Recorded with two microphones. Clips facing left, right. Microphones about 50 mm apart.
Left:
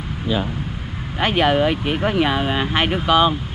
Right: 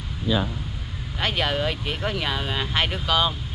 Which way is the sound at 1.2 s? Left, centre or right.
Left.